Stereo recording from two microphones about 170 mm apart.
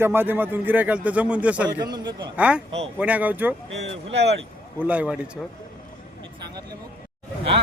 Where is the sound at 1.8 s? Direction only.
25° right (ahead or behind).